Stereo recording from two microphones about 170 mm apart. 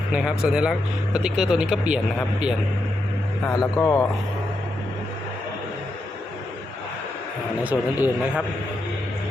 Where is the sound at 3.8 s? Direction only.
15° left (ahead or behind).